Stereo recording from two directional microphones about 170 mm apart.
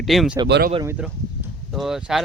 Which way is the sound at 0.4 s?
80° right.